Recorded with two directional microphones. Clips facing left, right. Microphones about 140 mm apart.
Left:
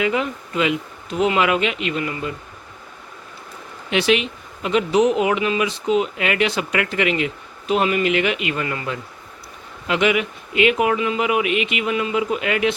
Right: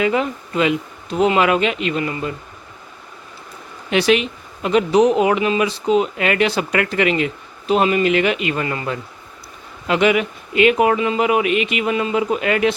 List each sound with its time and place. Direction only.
0.0 s speech: 40° right (ahead or behind)
3.9 s speech: 40° right (ahead or behind)